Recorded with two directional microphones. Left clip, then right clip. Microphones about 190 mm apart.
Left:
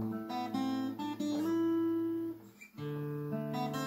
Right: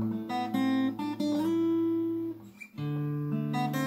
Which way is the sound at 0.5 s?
35° right (ahead or behind).